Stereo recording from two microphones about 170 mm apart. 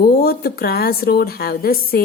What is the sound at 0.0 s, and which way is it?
A woman's voice, 65° left (ahead or behind).